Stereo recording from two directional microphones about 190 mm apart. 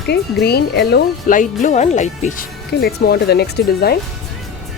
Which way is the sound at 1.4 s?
40° left (ahead or behind).